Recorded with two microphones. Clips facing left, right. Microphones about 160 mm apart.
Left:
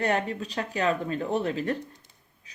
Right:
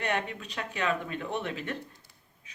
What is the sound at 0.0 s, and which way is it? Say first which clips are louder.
A woman's voice: left 5 dB; 35° left (ahead or behind).